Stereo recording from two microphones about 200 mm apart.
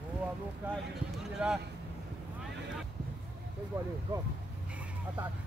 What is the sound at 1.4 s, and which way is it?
Speech, 5° right (ahead or behind).